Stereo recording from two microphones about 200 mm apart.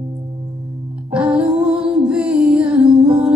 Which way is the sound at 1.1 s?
5° right (ahead or behind).